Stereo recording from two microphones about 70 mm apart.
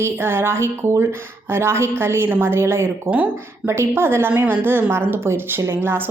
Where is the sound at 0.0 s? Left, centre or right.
Right.